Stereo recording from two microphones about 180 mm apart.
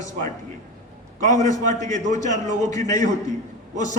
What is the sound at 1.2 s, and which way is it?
A man's voice, 40° right (ahead or behind).